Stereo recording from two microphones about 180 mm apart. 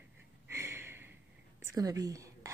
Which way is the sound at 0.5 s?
15° right (ahead or behind).